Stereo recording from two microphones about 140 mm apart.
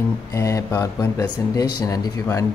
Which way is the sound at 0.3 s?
20° left (ahead or behind).